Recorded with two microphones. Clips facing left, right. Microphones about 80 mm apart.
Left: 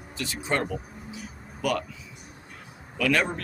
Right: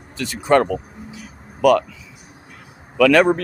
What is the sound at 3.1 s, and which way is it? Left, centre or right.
Speech, right.